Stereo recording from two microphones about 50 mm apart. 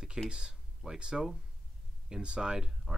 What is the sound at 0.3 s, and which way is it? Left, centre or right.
Speech, centre.